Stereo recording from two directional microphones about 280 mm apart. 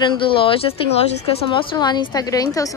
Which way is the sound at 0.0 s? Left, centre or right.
Centre.